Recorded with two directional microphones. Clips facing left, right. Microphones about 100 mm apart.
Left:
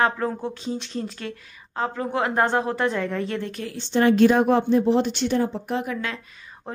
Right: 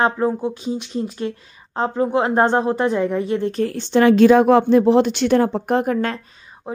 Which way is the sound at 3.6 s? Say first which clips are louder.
Right 9 dB; 50° right (ahead or behind).